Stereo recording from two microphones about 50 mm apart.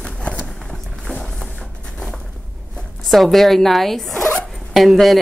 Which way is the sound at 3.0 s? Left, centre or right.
Centre.